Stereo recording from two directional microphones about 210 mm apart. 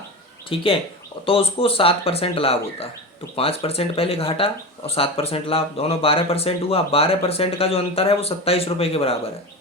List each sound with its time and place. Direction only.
0.5 s speech: 25° left (ahead or behind)